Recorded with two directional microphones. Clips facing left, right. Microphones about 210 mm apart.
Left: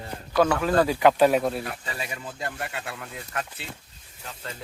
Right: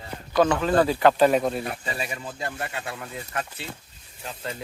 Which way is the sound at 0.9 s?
10° left (ahead or behind).